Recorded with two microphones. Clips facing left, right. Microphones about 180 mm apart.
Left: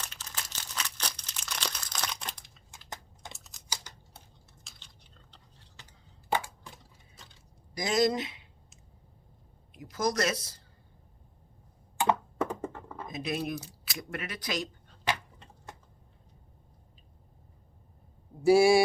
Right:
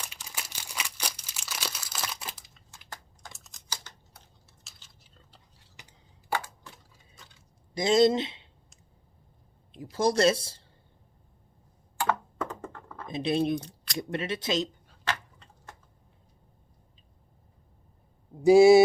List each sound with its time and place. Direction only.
0.0 s crumpling: 10° right (ahead or behind)
2.9 s typing: 20° left (ahead or behind)
3.3 s typing: centre (ahead or behind)
3.9 s computer keyboard: 10° left (ahead or behind)
4.7 s a sound: 5° right (ahead or behind)
5.8 s a sound: 15° right (ahead or behind)
7.7 s speech: 25° right (ahead or behind)
9.9 s speech: 30° right (ahead or behind)
11.9 s computer keyboard: 15° left (ahead or behind)
13.1 s speech: 30° right (ahead or behind)
13.6 s a sound: 5° left (ahead or behind)
14.0 s speech: 25° right (ahead or behind)
18.4 s speech: 20° right (ahead or behind)